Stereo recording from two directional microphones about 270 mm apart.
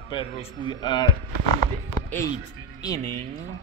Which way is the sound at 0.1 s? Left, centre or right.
Centre.